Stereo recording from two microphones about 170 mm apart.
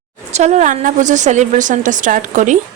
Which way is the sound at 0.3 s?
40° right (ahead or behind).